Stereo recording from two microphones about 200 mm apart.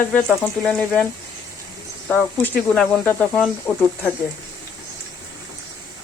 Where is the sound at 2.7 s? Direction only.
5° left (ahead or behind).